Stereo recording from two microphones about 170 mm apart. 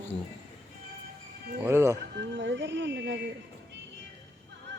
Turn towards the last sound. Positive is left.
turn(degrees=-90)